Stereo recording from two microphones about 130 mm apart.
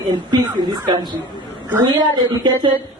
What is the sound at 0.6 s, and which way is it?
A woman's voice, 35° right (ahead or behind).